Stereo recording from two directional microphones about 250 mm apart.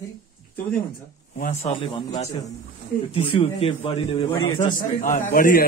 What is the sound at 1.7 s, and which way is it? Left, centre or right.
Speech, left.